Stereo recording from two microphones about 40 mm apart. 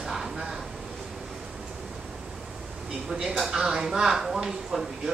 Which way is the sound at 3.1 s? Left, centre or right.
Centre.